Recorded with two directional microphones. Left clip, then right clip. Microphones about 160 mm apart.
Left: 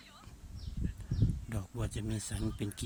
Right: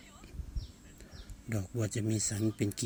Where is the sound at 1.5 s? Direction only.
Centre (ahead or behind).